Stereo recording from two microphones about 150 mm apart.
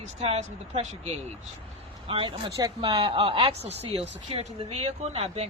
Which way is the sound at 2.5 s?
25° right (ahead or behind).